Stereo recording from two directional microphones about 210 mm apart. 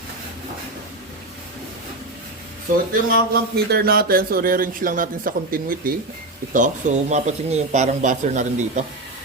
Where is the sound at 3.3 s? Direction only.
45° right (ahead or behind).